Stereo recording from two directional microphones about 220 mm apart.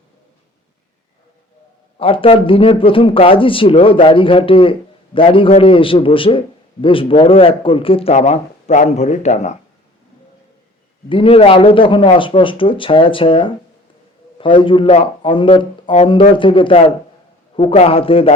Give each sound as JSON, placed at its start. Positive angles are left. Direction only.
{"t": 2.0, "sound": "speech", "side_deg": 25}
{"t": 11.1, "sound": "speech", "side_deg": 25}